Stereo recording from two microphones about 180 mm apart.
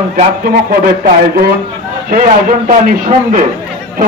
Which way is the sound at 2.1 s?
50° right (ahead or behind).